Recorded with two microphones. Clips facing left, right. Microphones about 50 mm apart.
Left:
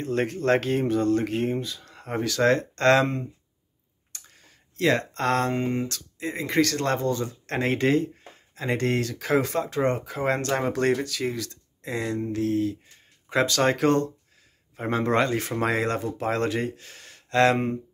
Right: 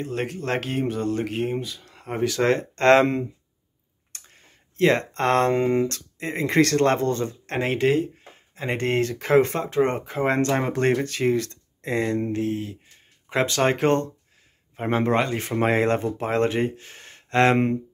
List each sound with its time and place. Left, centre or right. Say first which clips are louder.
0.0 s speech: left 3 dB; centre
2.2 s speech: right 1 dB; centre
4.1 s clicking: right 1 dB; right
4.7 s speech: right 3 dB; right
5.5 s speech: right 6 dB; right
5.9 s speech: right 2 dB; right
7.4 s speech: right 1 dB; centre
8.5 s speech: right 2 dB; right
9.2 s speech: right 5 dB; right
12.3 s speech: left 1 dB; right
15.5 s speech: right 4 dB; right